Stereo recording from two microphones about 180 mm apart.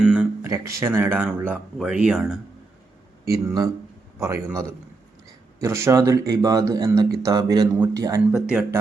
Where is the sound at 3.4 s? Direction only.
20° right (ahead or behind).